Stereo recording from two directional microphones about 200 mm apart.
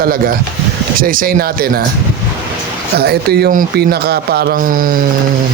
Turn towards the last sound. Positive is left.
turn(degrees=-45)  # may be behind; listen again after turning